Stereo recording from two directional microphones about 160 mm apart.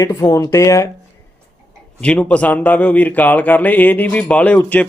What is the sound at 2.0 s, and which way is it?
Speech, 5° left (ahead or behind).